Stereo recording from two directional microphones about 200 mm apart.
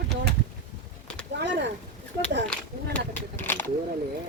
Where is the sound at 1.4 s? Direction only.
55° right (ahead or behind).